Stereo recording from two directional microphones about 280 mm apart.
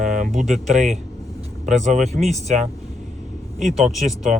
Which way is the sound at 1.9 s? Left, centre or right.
Centre.